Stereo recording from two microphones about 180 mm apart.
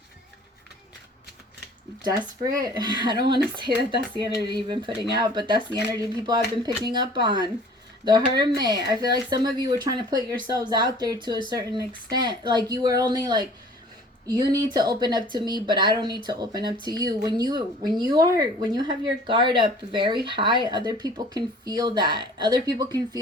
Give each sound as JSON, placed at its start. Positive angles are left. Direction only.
{"t": 2.0, "sound": "speech", "side_deg": -20}